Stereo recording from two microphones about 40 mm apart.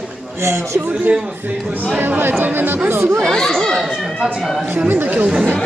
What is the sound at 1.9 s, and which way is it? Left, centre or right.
Speech, right.